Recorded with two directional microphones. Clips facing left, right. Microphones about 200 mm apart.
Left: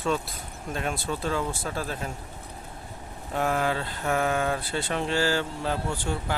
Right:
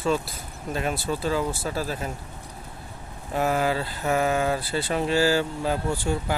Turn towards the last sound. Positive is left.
turn(degrees=-10)  # may be behind; listen again after turning